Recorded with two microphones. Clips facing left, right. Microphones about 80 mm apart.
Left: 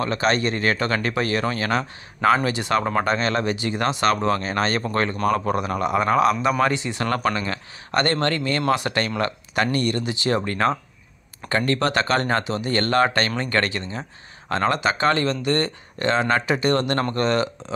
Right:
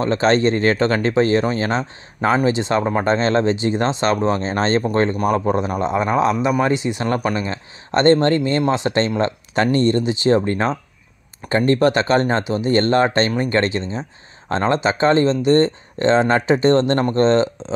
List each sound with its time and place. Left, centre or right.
0.0 s speech: right